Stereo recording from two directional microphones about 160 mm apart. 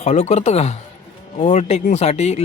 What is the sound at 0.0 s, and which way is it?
Speech, 45° left (ahead or behind).